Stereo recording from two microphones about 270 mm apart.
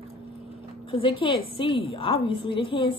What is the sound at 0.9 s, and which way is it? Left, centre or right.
A woman's voice, centre.